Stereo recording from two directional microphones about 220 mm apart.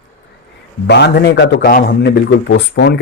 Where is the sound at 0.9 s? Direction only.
50° left (ahead or behind).